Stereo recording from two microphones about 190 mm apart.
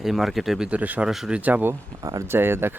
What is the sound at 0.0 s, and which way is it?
Speech, centre (ahead or behind).